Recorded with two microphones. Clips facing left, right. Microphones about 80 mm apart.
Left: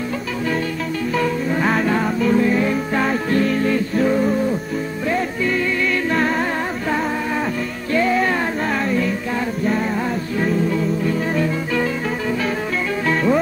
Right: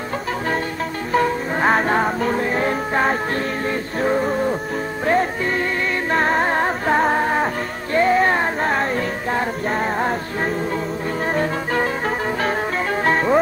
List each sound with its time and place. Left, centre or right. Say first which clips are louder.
1.1 s music: right 2 dB; right
5.0 s music: right 3 dB; right
10.4 s music: left 5 dB; right
13.0 s music: right 1 dB; right